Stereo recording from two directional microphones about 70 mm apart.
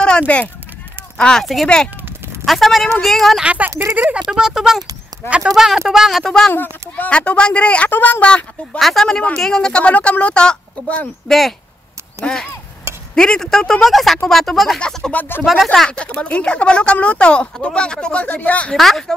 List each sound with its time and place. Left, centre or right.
0.3 s speech: centre
1.4 s speech: centre
3.4 s speech: right; by 6.3 s centre
6.5 s speech: left
7.1 s speech: centre
8.7 s speech: centre
11.2 s speech: centre
15.1 s speech: left
15.4 s speech: centre
16.0 s speech: centre
18.7 s speech: centre